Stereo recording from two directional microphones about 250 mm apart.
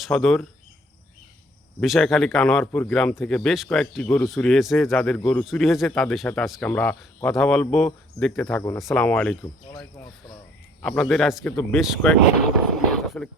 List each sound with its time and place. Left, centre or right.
0.0 s speech: centre
1.8 s a man's voice: centre
9.4 s speech: centre
10.8 s a man's voice: centre
13.1 s a sound: centre